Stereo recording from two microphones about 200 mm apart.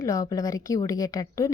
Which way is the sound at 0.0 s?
15° left (ahead or behind).